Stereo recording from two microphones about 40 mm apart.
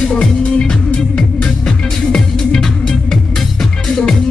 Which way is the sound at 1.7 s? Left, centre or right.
Centre.